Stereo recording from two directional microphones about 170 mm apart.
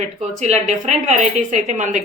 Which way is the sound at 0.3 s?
45° right (ahead or behind).